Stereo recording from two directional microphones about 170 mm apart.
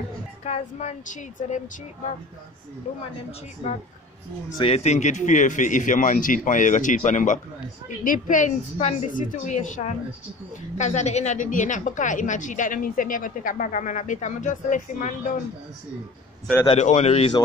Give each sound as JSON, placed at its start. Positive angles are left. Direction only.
{"t": 0.4, "sound": "a woman's voice", "side_deg": 40}
{"t": 4.6, "sound": "a woman's voice", "side_deg": 35}
{"t": 16.6, "sound": "speech", "side_deg": 40}